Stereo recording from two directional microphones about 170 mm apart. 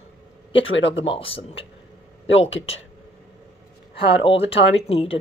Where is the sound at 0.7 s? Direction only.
90° left.